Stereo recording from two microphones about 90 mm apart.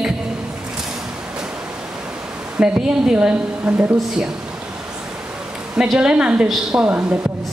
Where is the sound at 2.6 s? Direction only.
10° right (ahead or behind).